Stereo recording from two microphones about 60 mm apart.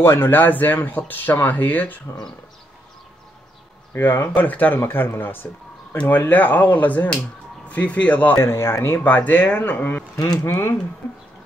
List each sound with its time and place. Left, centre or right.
0.0 s speech: left
0.4 s speech: left
3.9 s speech: left
8.4 s speech: left
9.0 s speech: left
10.1 s speech: left
10.4 s speech: left